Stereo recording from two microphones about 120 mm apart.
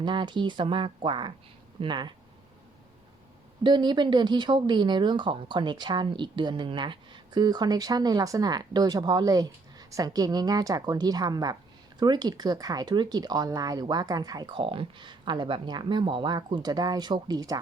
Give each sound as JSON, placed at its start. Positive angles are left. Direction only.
{"t": 0.0, "sound": "speech", "side_deg": -40}
{"t": 3.6, "sound": "speech", "side_deg": -40}
{"t": 14.5, "sound": "speech", "side_deg": -45}